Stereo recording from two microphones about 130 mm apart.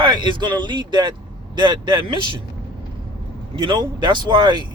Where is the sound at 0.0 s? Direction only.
35° right (ahead or behind).